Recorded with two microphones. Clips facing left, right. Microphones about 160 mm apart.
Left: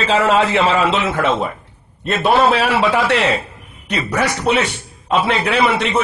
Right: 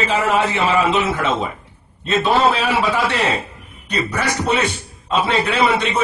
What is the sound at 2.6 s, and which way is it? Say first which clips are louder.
Speech: left 3 dB; 75° left (ahead or behind).